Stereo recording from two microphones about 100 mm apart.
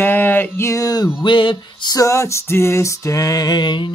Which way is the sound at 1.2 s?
55° left (ahead or behind).